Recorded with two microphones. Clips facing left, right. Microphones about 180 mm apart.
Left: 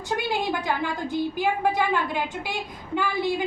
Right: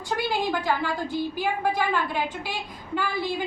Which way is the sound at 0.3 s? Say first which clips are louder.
Right 2 dB; 20° left (ahead or behind).